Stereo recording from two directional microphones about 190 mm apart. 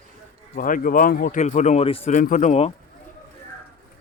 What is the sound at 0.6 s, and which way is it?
Speech, 45° left (ahead or behind).